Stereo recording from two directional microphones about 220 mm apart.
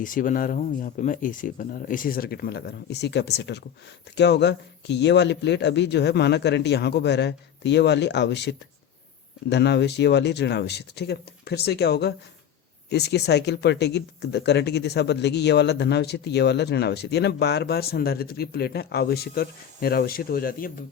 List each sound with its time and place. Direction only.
0.0 s speech: 35° left (ahead or behind)